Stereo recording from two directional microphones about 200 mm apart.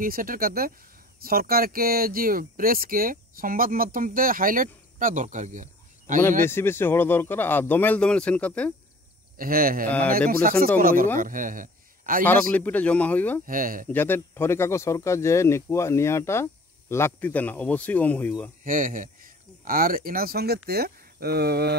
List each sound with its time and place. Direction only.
0.0 s speech: 45° right (ahead or behind)
6.4 s speech: 10° left (ahead or behind)
9.4 s speech: 45° right (ahead or behind)
9.8 s speech: 5° left (ahead or behind)
10.8 s a man's voice: 45° right (ahead or behind)
12.3 s speech: 10° left (ahead or behind)
13.5 s speech: 45° right (ahead or behind)
13.8 s speech: 10° left (ahead or behind)
18.6 s speech: 40° right (ahead or behind)